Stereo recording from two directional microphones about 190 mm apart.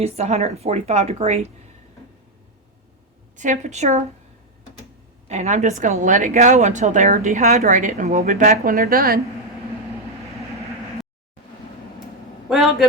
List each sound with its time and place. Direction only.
0.0 s a woman's voice: 35° right (ahead or behind)
3.3 s a woman's voice: 40° right (ahead or behind)
5.3 s a woman's voice: 35° right (ahead or behind)
12.5 s a sound: centre (ahead or behind)